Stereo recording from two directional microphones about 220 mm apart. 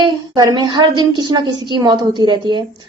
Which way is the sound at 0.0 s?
20° right (ahead or behind).